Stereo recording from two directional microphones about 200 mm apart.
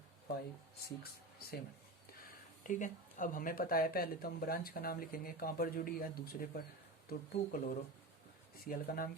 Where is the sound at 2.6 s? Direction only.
40° left (ahead or behind).